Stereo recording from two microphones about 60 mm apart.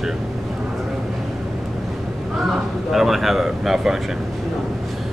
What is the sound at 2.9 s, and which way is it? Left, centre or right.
Speech, centre.